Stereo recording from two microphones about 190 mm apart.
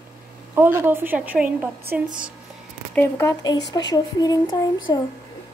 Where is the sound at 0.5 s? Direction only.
10° right (ahead or behind).